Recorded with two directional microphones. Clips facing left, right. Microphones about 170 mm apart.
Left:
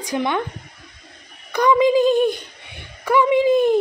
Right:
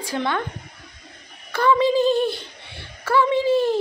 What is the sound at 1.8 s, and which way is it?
Speech, 15° left (ahead or behind).